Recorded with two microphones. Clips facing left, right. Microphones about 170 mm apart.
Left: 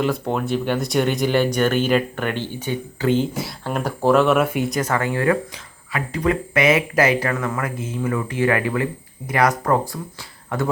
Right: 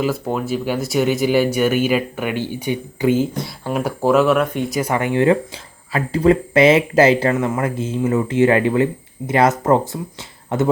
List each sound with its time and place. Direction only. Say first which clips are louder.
0.0 s speech: right 1 dB; 5° right (ahead or behind)
4.7 s speech: right 3 dB; 15° right (ahead or behind)